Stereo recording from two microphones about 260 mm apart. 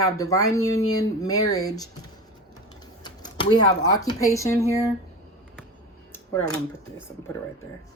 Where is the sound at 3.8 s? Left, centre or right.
Centre.